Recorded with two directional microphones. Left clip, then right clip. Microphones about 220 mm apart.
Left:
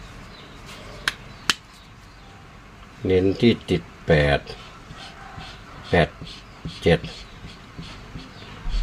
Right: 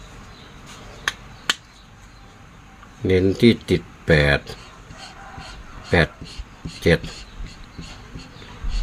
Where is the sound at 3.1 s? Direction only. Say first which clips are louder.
Right 2 dB; 30° right (ahead or behind).